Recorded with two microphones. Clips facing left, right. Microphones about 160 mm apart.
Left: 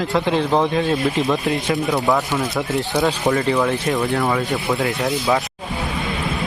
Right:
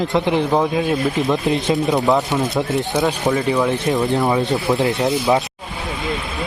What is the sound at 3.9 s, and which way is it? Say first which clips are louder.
Speech: right 2 dB; 20° right (ahead or behind).